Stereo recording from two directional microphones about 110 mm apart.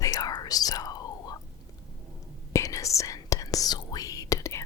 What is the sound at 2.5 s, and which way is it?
Whispering, 30° left (ahead or behind).